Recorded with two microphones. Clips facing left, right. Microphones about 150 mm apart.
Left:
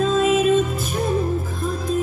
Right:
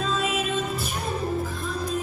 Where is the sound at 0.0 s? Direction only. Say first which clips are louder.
Left 9 dB; 45° left (ahead or behind).